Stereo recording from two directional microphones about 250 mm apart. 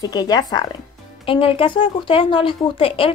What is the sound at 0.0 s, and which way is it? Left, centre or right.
Speech, centre.